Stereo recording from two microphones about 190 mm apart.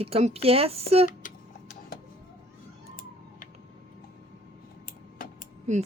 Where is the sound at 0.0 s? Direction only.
35° right (ahead or behind).